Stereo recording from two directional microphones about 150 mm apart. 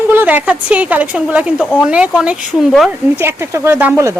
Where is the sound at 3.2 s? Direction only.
15° right (ahead or behind).